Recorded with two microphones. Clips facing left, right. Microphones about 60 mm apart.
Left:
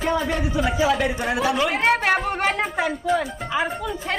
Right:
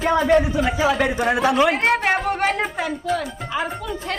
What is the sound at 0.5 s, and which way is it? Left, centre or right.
Speech, right.